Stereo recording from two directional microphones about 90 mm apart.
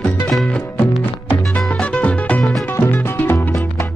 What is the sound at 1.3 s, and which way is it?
Music, 15° left (ahead or behind).